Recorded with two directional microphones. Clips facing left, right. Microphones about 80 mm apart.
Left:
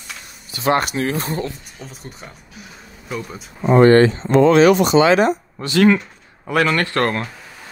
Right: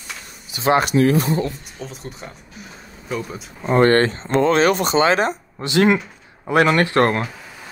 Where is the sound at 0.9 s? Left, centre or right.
Left.